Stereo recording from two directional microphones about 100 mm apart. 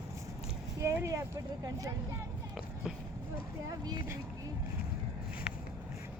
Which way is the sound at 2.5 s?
5° right (ahead or behind).